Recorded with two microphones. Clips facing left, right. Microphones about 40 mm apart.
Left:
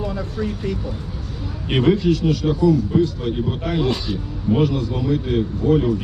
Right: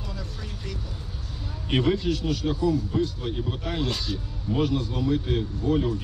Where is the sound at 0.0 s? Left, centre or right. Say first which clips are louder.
Left 13 dB; left.